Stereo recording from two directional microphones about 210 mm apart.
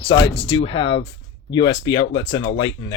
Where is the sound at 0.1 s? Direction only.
20° left (ahead or behind).